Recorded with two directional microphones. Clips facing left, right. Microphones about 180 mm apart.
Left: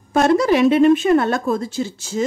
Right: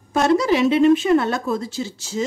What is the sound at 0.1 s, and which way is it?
Speech, 55° left (ahead or behind).